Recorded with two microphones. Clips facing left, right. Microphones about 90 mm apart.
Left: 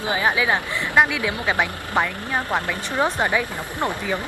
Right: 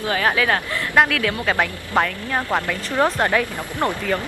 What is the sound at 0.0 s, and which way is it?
Speech, 15° left (ahead or behind).